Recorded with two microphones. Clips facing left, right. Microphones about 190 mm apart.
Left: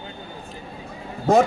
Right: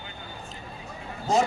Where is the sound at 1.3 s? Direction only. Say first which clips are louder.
Left 7 dB; 55° left (ahead or behind).